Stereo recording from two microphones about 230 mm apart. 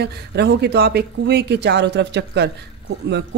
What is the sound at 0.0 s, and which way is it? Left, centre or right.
A man's voice, right.